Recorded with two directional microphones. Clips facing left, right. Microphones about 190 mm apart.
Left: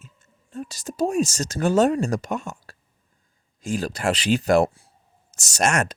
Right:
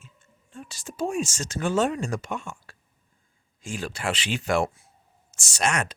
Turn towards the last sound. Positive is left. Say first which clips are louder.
# left 4 dB
turn(degrees=45)  # may be behind; listen again after turning